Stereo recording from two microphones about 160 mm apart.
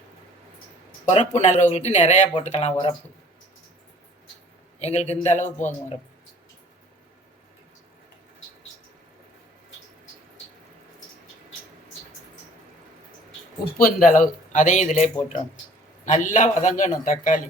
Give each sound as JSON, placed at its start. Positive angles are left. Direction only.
{"t": 0.9, "sound": "speech", "side_deg": 45}
{"t": 4.8, "sound": "speech", "side_deg": 45}
{"t": 13.8, "sound": "speech", "side_deg": 55}